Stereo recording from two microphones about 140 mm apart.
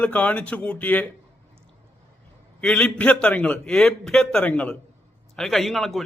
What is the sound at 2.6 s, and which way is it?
A man's voice, 10° left (ahead or behind).